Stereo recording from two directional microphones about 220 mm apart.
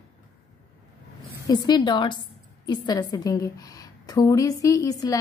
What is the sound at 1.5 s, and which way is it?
A woman's voice, 20° left (ahead or behind).